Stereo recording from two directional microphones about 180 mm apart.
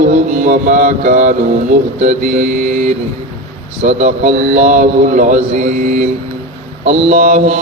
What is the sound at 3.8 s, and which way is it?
A man's voice, 40° right (ahead or behind).